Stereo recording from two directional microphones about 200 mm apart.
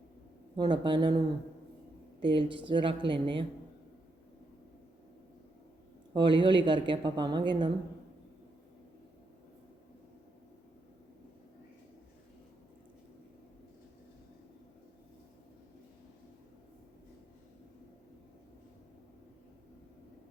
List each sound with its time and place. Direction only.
0.5 s speech: 20° right (ahead or behind)
2.2 s speech: 25° right (ahead or behind)
6.1 s speech: 25° right (ahead or behind)